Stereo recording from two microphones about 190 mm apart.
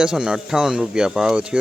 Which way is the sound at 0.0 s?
5° right (ahead or behind).